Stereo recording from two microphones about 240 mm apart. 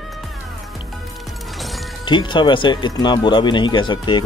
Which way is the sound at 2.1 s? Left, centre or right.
Centre.